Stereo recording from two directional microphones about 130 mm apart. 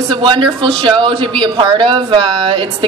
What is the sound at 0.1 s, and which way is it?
A man's voice, 40° right (ahead or behind).